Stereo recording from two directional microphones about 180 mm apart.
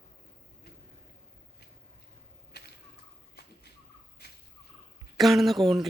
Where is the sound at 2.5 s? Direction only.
60° left (ahead or behind).